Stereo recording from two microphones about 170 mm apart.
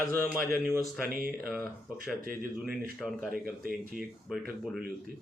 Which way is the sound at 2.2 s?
60° right (ahead or behind).